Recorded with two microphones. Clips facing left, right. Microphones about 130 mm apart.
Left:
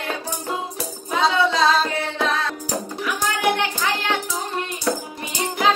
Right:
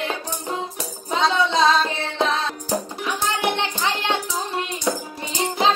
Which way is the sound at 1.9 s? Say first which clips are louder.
Even; 25° right (ahead or behind).